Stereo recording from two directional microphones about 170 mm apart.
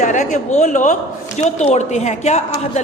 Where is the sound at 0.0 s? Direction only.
45° left (ahead or behind).